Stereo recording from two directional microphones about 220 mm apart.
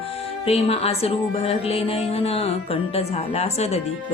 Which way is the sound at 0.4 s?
25° left (ahead or behind).